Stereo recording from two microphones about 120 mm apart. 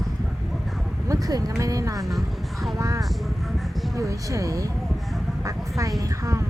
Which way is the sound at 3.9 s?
25° right (ahead or behind).